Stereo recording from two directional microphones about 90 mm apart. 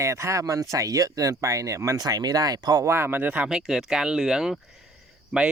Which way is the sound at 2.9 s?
25° right (ahead or behind).